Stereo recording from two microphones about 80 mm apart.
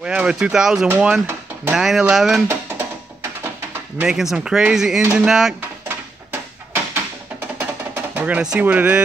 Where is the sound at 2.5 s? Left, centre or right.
Right.